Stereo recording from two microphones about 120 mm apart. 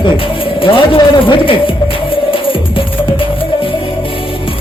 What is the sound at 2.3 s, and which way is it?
Music, 45° left (ahead or behind).